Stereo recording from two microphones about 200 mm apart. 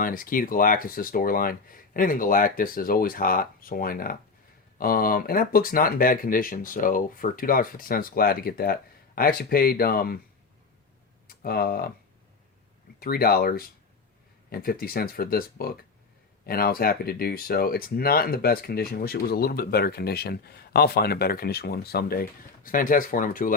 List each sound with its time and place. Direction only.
0.0 s speech: 45° left (ahead or behind)
11.3 s speech: 50° left (ahead or behind)
13.0 s speech: 50° left (ahead or behind)